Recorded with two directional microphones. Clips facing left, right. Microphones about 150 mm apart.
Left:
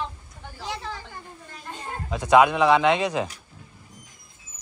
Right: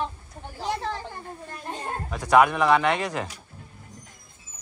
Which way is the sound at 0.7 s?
55° right (ahead or behind).